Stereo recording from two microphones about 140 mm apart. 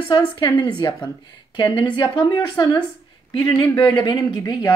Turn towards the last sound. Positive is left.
turn(degrees=30)  # may be behind; listen again after turning